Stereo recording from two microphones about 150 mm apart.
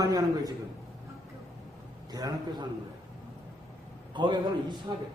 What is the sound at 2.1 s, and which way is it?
Speech, 25° right (ahead or behind).